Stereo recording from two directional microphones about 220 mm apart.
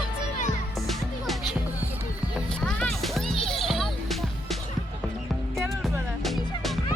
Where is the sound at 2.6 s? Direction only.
Centre (ahead or behind).